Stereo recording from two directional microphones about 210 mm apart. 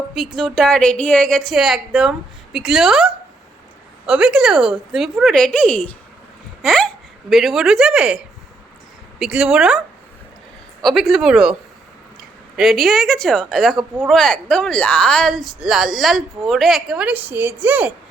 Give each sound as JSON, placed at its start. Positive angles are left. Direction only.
{"t": 0.1, "sound": "speech", "side_deg": 0}
{"t": 10.8, "sound": "speech", "side_deg": 0}
{"t": 12.5, "sound": "speech", "side_deg": 0}